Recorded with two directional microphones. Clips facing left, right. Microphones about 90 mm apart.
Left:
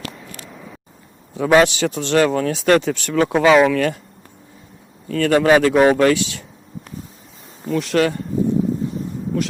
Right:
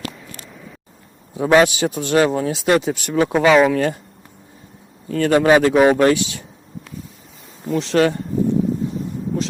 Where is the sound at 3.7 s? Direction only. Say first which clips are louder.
Even; 30° right (ahead or behind).